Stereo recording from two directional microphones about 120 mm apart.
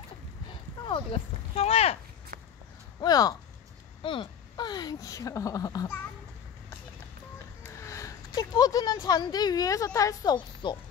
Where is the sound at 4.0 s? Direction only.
45° left (ahead or behind).